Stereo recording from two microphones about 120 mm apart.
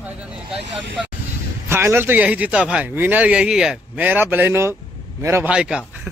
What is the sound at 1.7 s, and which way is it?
A man's voice, 20° right (ahead or behind).